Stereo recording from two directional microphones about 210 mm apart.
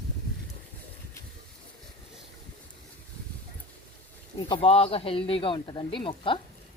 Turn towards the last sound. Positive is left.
turn(degrees=25)  # may be behind; listen again after turning